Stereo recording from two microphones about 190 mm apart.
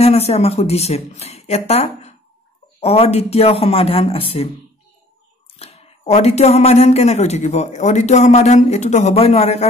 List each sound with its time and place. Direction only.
0.0 s speech: 35° left (ahead or behind)
5.6 s speech: 35° left (ahead or behind)